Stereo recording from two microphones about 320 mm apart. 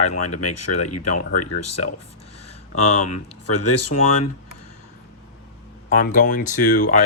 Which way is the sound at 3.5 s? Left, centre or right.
Left.